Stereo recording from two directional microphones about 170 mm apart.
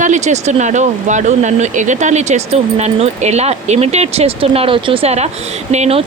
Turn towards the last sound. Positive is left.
turn(degrees=-40)  # may be behind; listen again after turning